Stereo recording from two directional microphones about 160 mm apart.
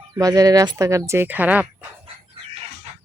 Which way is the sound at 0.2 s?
20° right (ahead or behind).